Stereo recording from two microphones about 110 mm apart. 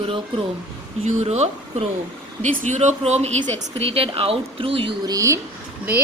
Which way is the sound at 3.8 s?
60° right (ahead or behind).